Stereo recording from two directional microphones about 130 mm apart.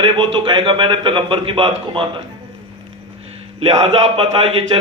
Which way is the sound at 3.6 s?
50° right (ahead or behind).